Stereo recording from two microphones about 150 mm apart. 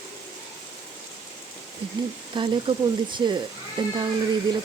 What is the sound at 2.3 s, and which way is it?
Speech, 30° right (ahead or behind).